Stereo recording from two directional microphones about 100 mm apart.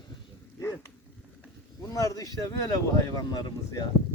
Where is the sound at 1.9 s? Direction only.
35° left (ahead or behind).